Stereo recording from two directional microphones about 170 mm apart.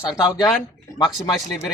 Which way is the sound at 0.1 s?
20° left (ahead or behind).